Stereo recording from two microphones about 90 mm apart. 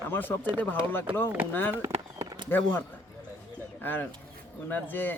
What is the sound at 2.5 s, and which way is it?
Speech, 20° left (ahead or behind).